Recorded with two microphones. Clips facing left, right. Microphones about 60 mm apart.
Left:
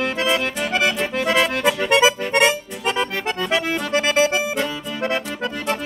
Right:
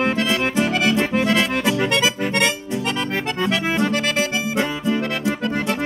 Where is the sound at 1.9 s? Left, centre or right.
Centre.